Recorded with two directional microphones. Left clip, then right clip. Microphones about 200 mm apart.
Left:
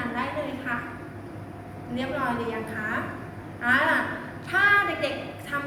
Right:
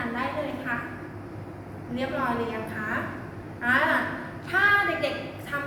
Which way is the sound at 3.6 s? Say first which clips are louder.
Left 1 dB; centre (ahead or behind).